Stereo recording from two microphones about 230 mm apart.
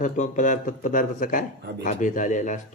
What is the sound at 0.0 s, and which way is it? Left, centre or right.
Speech, left.